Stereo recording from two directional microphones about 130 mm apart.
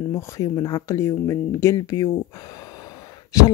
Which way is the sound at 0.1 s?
25° left (ahead or behind).